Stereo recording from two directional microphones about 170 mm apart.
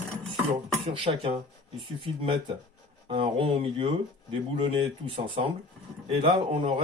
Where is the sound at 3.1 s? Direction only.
30° right (ahead or behind).